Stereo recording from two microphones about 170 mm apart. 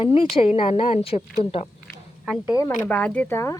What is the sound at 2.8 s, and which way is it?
Speech, 10° left (ahead or behind).